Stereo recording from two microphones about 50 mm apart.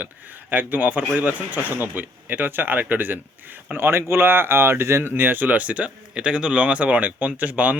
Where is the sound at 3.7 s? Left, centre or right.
Right.